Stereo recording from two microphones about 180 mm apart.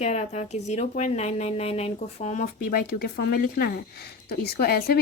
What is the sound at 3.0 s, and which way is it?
Speech, 55° left (ahead or behind).